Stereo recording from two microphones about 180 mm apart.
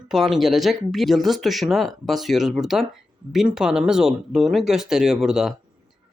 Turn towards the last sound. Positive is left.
turn(degrees=0)  # may be behind; listen again after turning